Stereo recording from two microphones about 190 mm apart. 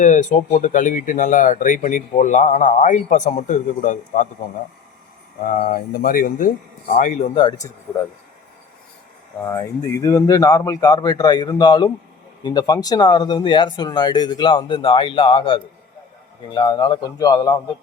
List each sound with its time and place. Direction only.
0.0 s speech: 40° left (ahead or behind)
5.4 s speech: 45° left (ahead or behind); by 7.7 s 20° left (ahead or behind)
9.4 s speech: 15° left (ahead or behind)